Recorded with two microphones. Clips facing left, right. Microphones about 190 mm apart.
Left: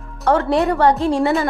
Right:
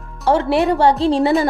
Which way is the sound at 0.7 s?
30° right (ahead or behind).